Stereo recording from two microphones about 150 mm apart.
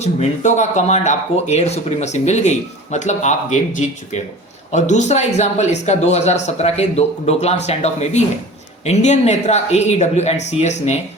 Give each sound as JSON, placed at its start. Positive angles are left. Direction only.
{"t": 0.0, "sound": "speech", "side_deg": 50}